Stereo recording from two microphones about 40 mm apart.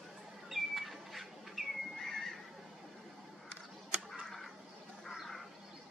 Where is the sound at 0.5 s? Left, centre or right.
Centre.